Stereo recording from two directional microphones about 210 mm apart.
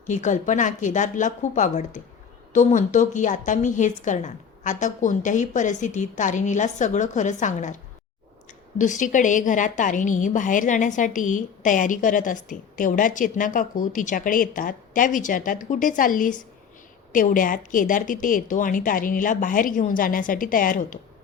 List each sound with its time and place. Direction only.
0.1 s a woman's voice: 35° left (ahead or behind)
8.8 s a woman's voice: 35° left (ahead or behind)